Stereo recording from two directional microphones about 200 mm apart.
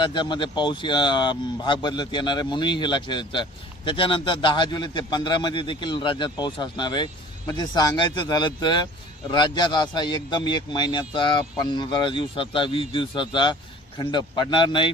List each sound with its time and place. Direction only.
0.0 s speech: 25° left (ahead or behind)